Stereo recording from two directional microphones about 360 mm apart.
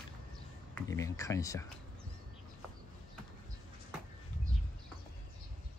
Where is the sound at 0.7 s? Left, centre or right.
Centre.